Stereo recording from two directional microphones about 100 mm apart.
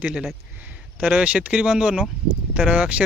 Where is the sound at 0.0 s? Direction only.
10° right (ahead or behind).